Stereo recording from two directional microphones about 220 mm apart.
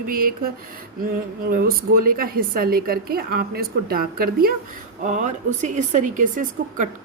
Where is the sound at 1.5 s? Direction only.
40° right (ahead or behind).